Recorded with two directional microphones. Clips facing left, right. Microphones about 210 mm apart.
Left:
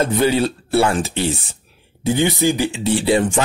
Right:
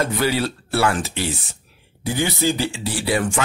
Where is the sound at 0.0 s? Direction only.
25° left (ahead or behind).